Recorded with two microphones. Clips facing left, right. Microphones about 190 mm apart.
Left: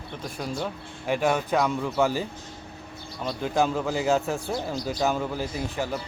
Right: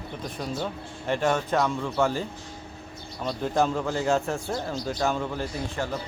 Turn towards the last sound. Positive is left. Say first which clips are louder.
# left 1 dB
turn(degrees=5)  # may be behind; listen again after turning